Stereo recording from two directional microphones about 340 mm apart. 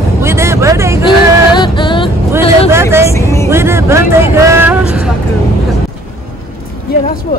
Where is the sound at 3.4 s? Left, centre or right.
Centre.